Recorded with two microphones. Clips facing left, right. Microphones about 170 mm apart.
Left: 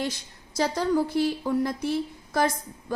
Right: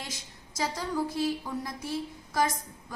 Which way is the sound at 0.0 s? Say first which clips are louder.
Left 11 dB; 65° left (ahead or behind).